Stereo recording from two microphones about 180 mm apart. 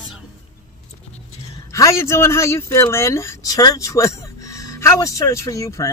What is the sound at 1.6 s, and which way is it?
Speech, 15° left (ahead or behind).